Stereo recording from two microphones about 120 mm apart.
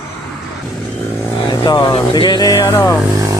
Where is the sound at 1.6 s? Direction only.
40° left (ahead or behind); by 3.0 s 25° left (ahead or behind).